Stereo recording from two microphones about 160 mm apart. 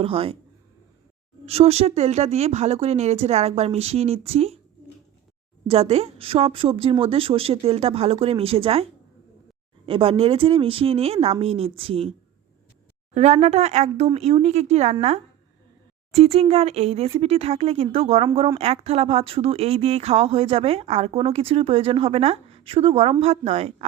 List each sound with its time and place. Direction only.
0.0 s speech: 35° right (ahead or behind)
1.5 s speech: 40° right (ahead or behind)
5.6 s speech: 40° right (ahead or behind)
13.1 s speech: 40° right (ahead or behind)
16.1 s speech: 40° right (ahead or behind)